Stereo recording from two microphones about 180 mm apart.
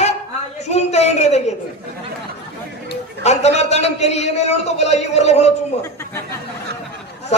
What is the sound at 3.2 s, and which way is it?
A man's voice, 40° left (ahead or behind).